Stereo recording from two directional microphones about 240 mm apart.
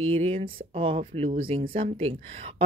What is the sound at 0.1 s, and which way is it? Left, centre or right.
Speech, right.